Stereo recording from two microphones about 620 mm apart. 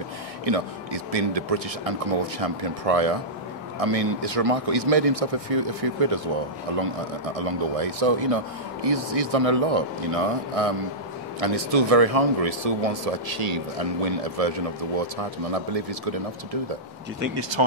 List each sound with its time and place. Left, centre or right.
0.5 s speech: right
4.2 s speech: right
7.3 s speech: right
15.5 s speech: right
17.4 s speech: right